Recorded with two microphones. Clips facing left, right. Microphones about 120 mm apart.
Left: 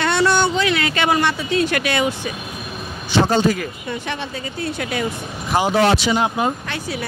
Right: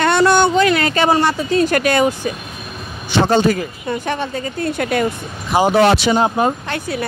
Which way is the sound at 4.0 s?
45° right (ahead or behind).